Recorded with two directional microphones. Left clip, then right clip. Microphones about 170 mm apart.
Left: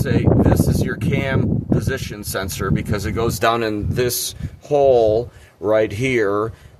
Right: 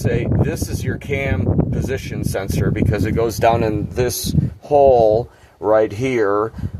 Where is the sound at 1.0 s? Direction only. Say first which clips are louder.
Right 2 dB; 20° left (ahead or behind).